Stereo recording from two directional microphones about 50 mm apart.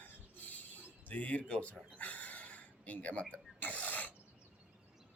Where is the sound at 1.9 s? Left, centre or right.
Left.